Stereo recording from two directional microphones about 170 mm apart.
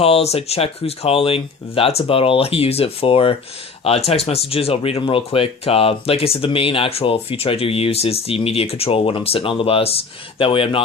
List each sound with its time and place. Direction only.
0.0 s speech: 35° left (ahead or behind)